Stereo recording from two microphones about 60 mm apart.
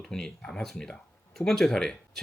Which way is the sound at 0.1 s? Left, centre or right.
Centre.